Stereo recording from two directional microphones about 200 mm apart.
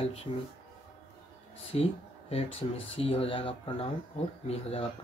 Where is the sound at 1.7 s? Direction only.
30° left (ahead or behind).